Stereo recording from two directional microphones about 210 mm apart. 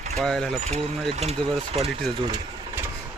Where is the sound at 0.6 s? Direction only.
30° right (ahead or behind).